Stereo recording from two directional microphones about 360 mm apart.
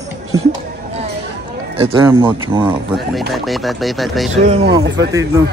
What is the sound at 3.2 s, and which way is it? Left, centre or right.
Speech, centre.